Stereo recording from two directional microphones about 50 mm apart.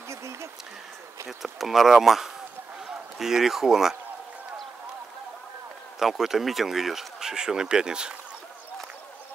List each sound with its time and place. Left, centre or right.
0.1 s a sound: right
1.2 s speech: centre
5.9 s speech: centre